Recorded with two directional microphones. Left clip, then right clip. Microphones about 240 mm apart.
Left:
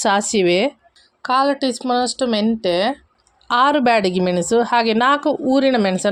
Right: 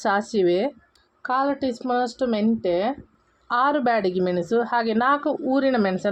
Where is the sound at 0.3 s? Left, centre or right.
Left.